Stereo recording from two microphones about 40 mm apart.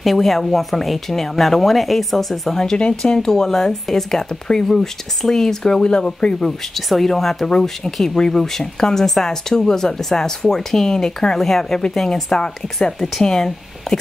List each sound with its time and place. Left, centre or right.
0.0 s a woman's voice: centre
2.8 s speech: left
6.4 s a woman's voice: centre